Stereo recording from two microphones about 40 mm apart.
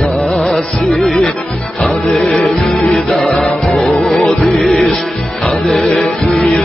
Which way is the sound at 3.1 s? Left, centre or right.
Centre.